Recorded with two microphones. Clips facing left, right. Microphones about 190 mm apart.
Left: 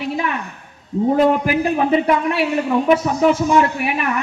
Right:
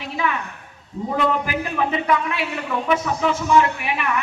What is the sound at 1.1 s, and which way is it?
A man's voice, 40° left (ahead or behind).